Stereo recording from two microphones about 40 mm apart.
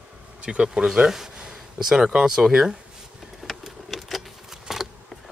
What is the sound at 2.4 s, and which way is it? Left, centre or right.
Speech, centre.